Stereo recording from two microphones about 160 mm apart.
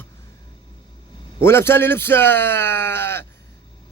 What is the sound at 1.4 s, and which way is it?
Speech, 15° left (ahead or behind).